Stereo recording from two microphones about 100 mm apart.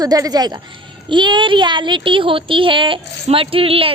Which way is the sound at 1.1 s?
50° right (ahead or behind).